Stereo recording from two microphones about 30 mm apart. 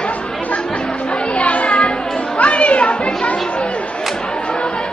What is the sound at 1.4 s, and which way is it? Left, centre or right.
Children playing, left.